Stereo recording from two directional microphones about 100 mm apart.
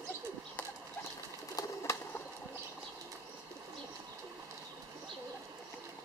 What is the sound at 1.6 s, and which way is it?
Bird, 35° left (ahead or behind).